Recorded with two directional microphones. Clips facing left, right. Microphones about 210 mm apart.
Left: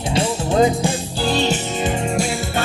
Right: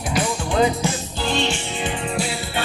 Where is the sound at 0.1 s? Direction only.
25° left (ahead or behind).